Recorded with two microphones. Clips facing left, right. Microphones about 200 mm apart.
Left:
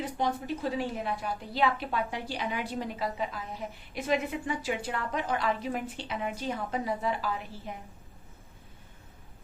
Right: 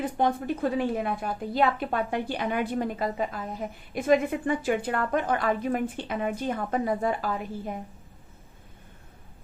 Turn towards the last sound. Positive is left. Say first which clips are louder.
# right 4 dB
turn(degrees=-50)  # may be behind; listen again after turning